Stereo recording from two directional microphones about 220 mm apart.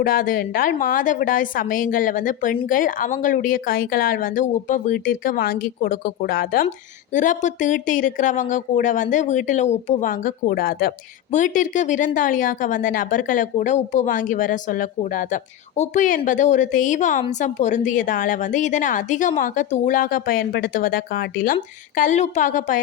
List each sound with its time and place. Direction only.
0.0 s speech: 40° left (ahead or behind)